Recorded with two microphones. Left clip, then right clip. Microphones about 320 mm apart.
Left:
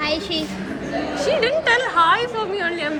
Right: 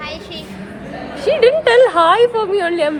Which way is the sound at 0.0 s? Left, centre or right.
Left.